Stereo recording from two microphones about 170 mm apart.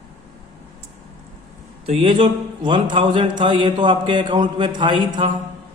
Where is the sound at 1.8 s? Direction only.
35° right (ahead or behind).